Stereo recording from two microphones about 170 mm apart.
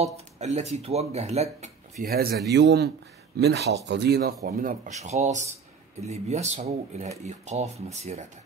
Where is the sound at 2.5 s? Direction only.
90° right; by 4.3 s 70° right (ahead or behind).